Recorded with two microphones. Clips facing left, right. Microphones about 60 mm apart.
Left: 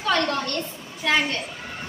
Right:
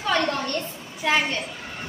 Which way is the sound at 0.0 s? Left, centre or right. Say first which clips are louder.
Left 1 dB; centre.